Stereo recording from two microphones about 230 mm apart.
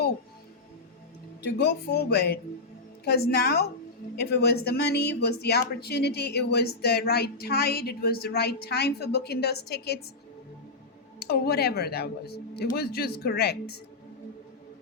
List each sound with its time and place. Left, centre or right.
1.5 s speech: left
11.2 s speech: left